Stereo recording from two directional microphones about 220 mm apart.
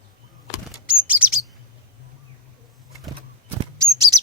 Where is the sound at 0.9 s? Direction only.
5° right (ahead or behind).